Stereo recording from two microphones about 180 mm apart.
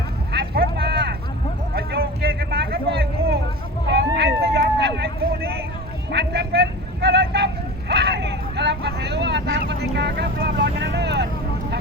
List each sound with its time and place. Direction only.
0.3 s vehicle: 60° right (ahead or behind)